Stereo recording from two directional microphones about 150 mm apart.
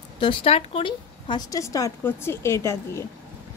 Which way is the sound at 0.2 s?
35° left (ahead or behind).